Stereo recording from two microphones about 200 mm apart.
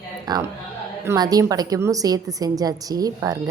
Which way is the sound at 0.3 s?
20° right (ahead or behind).